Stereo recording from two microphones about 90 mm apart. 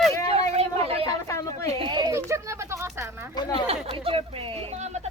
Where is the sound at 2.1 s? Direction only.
35° right (ahead or behind).